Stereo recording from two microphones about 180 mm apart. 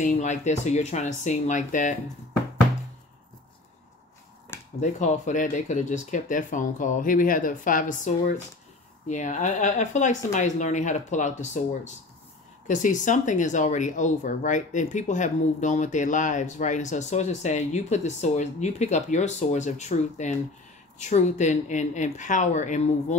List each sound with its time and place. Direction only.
0.0 s speech: 45° left (ahead or behind)
4.7 s speech: 40° left (ahead or behind)